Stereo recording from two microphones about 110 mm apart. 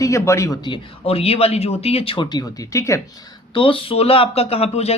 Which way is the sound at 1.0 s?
65° left (ahead or behind).